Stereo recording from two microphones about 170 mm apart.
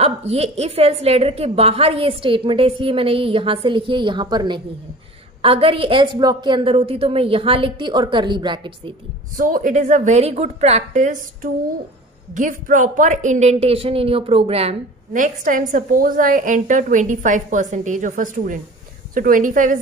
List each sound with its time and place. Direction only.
0.0 s a woman's voice: 35° right (ahead or behind)
9.4 s a woman's voice: 50° right (ahead or behind)